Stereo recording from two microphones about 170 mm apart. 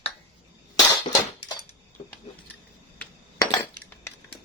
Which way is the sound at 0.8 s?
25° left (ahead or behind).